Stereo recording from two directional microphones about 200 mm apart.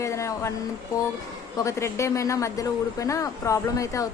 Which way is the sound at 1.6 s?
15° left (ahead or behind).